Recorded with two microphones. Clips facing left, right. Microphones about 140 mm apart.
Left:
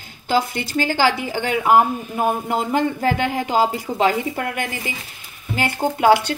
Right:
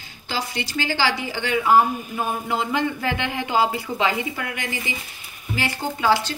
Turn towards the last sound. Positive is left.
turn(degrees=60)  # may be behind; listen again after turning